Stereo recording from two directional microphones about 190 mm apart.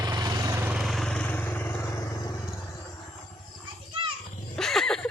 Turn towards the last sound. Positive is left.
turn(degrees=5)  # may be behind; listen again after turning